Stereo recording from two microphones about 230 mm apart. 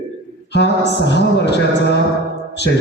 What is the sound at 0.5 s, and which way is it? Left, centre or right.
A man's voice, left.